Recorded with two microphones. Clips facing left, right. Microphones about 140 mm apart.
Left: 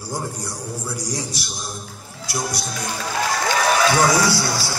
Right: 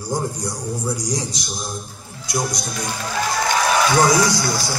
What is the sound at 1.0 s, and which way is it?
Speech, 15° right (ahead or behind).